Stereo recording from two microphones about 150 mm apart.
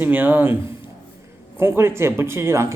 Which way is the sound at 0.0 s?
10° right (ahead or behind).